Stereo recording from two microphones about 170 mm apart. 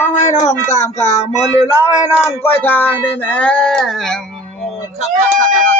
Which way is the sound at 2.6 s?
10° left (ahead or behind).